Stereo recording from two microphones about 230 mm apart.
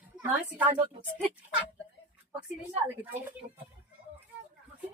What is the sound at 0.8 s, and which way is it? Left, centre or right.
Speech, centre.